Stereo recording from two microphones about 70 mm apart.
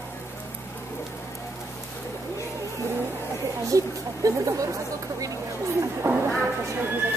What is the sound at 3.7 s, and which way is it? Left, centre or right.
Speech, right.